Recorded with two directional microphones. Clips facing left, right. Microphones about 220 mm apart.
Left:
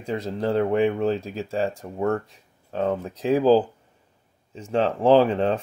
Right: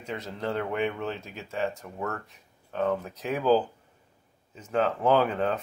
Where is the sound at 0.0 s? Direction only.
35° left (ahead or behind).